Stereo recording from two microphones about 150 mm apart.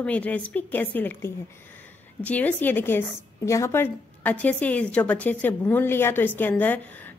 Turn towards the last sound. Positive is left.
turn(degrees=10)  # may be behind; listen again after turning